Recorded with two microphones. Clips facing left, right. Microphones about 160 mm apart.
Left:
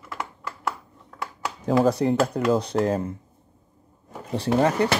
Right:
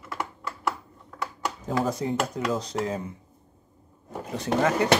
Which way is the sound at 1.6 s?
70° left (ahead or behind).